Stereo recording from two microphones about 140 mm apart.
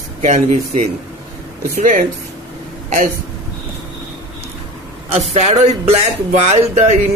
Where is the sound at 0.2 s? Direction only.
65° right (ahead or behind).